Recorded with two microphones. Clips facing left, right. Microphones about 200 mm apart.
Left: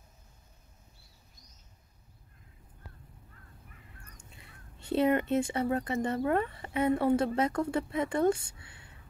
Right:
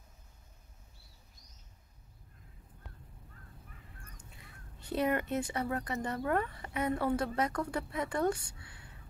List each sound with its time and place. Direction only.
4.7 s speech: 25° left (ahead or behind)